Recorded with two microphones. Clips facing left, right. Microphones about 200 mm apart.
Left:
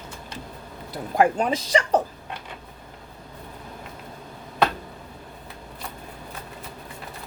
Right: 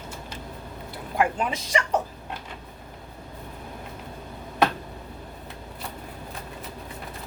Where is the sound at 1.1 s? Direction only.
35° left (ahead or behind).